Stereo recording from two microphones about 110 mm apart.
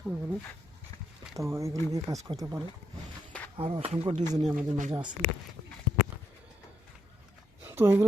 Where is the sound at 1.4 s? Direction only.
25° right (ahead or behind).